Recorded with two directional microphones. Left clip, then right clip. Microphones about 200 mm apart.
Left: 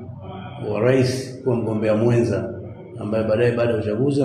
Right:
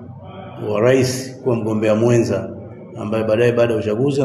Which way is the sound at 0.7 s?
45° right (ahead or behind).